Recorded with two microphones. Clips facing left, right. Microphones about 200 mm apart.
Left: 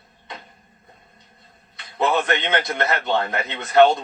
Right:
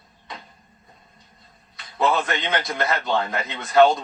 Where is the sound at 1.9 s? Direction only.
25° left (ahead or behind).